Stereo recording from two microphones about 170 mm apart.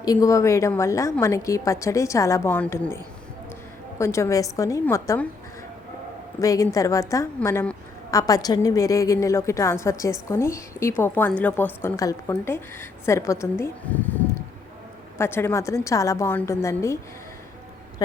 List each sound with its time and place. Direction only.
0.0 s a woman's voice: 20° left (ahead or behind)
6.4 s a woman's voice: 20° left (ahead or behind)
15.2 s a woman's voice: 15° left (ahead or behind)